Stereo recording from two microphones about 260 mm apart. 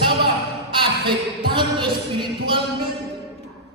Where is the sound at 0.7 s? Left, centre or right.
Centre.